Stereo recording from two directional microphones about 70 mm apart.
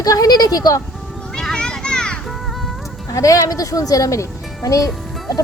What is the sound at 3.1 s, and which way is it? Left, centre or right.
Speech, left.